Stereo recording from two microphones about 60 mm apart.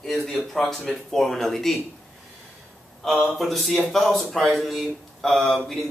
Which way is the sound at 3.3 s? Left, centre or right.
Centre.